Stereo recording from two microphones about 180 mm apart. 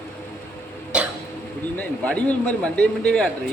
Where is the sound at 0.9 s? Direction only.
5° right (ahead or behind).